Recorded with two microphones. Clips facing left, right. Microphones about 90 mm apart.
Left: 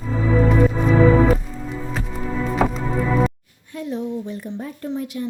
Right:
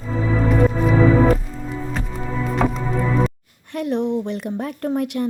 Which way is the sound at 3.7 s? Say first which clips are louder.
Right 5 dB; 70° right (ahead or behind).